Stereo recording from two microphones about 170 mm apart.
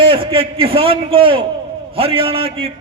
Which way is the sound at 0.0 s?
30° right (ahead or behind).